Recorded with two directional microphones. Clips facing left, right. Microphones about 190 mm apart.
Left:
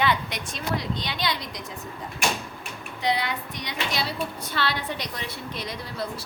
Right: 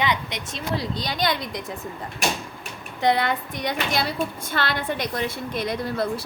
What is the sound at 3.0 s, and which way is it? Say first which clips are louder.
A woman's voice: right 5 dB; 55° right (ahead or behind).